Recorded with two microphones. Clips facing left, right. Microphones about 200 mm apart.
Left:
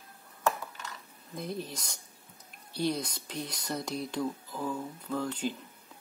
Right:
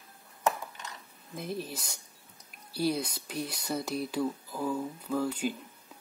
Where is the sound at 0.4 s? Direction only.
20° right (ahead or behind).